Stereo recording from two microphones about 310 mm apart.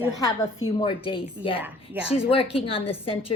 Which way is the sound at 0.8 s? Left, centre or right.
Centre.